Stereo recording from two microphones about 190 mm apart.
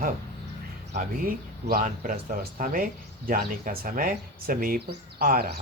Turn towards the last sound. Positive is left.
turn(degrees=-50)  # may be behind; listen again after turning